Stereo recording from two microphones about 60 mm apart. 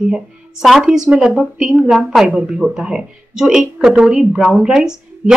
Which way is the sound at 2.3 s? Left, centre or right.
Centre.